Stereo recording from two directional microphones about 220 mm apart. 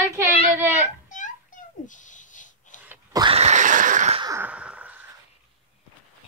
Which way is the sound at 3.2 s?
25° right (ahead or behind).